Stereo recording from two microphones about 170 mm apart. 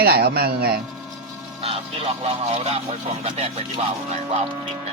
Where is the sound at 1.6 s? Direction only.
35° right (ahead or behind).